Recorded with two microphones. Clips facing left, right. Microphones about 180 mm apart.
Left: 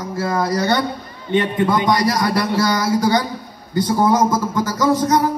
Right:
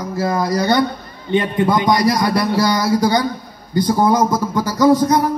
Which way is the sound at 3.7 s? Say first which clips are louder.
Right 1 dB; 25° left (ahead or behind).